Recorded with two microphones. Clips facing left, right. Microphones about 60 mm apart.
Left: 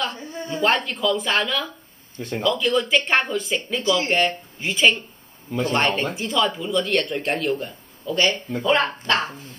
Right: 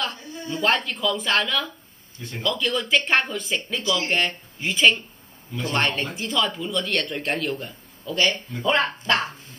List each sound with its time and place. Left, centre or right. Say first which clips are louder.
0.2 s a sound: left 2 dB; left
0.6 s a man's voice: left 2 dB; centre
2.1 s speech: left 7 dB; left
2.4 s a man's voice: left 4 dB; centre